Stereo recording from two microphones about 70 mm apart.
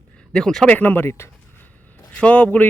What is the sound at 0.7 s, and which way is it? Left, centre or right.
Speech, left.